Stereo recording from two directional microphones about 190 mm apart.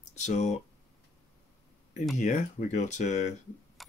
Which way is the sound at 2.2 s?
40° left (ahead or behind).